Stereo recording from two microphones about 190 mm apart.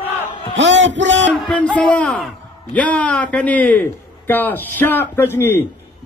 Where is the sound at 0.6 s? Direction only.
75° right (ahead or behind).